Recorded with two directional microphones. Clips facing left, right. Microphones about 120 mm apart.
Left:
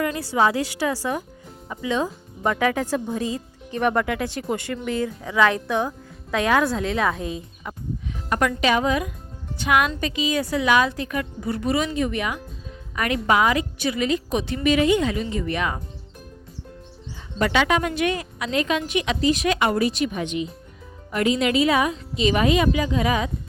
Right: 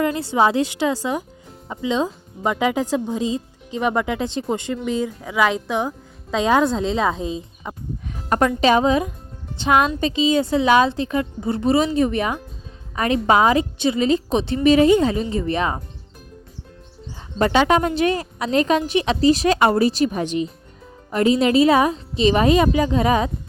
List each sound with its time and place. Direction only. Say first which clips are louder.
0.0 s a woman's voice: right 3 dB; 25° right (ahead or behind)
17.3 s a woman's voice: right 4 dB; 35° right (ahead or behind)